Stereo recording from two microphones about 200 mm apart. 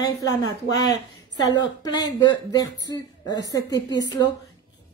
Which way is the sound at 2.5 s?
20° left (ahead or behind).